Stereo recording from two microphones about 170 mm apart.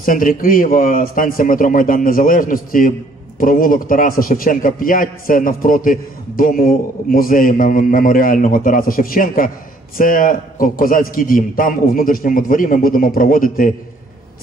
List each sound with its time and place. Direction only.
0.0 s a man's voice: 55° left (ahead or behind)